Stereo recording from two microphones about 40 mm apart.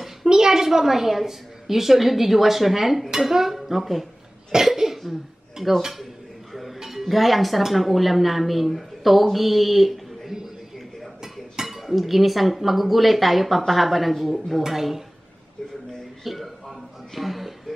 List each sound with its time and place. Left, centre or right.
0.3 s a woman's voice: centre
4.5 s cough: centre
5.8 s speech: centre
11.6 s speech: centre
16.3 s a sound: centre